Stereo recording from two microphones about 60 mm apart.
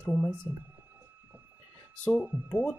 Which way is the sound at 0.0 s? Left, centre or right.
Left.